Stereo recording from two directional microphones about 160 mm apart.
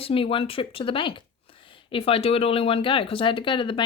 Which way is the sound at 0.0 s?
35° left (ahead or behind).